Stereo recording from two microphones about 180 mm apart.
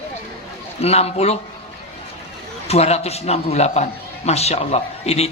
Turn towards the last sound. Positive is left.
turn(degrees=35)  # may be behind; listen again after turning